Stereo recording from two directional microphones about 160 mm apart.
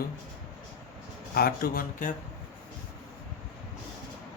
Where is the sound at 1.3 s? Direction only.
70° left (ahead or behind).